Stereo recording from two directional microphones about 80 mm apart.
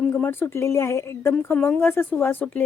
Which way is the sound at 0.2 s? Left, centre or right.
Left.